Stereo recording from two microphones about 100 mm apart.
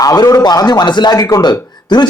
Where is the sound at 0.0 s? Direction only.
40° left (ahead or behind).